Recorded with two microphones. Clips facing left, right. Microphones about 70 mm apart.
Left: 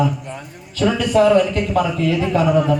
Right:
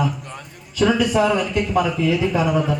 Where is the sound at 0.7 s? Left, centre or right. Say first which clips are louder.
Left 2 dB; centre.